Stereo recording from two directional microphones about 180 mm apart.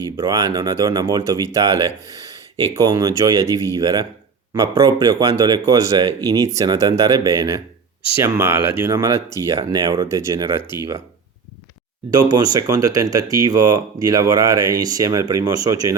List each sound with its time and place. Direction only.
0.2 s speech: 20° right (ahead or behind)
10.6 s speech: 25° left (ahead or behind)
12.1 s speech: 20° right (ahead or behind)